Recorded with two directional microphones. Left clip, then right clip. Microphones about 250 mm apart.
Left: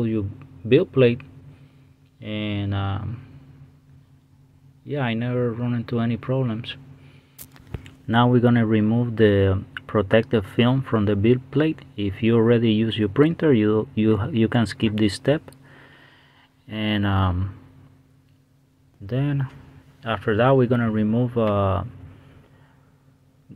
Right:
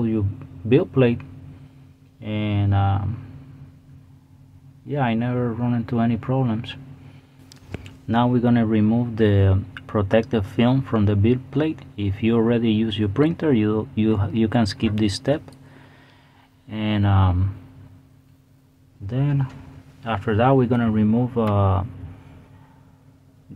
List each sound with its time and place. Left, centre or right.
0.7 s speech: centre
4.8 s speech: centre
7.8 s speech: centre
16.6 s speech: centre
19.0 s speech: centre